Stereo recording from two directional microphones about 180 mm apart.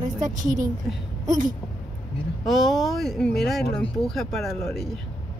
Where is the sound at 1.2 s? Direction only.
20° right (ahead or behind).